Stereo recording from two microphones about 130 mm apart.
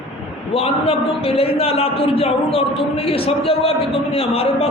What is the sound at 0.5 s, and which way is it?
A man's voice, 45° left (ahead or behind).